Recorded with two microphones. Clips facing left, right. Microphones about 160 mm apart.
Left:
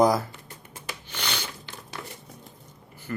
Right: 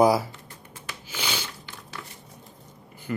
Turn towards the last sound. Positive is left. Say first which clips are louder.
# right 2 dB
turn(degrees=-15)  # may be behind; listen again after turning